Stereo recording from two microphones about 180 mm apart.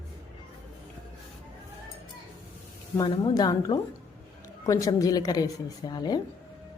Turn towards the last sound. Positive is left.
turn(degrees=20)  # may be behind; listen again after turning